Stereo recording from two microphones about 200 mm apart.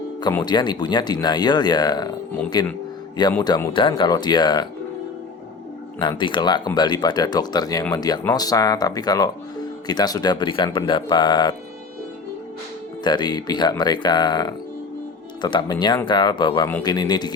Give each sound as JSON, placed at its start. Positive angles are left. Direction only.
{"t": 0.2, "sound": "speech", "side_deg": 20}
{"t": 6.0, "sound": "speech", "side_deg": 25}
{"t": 13.1, "sound": "speech", "side_deg": 20}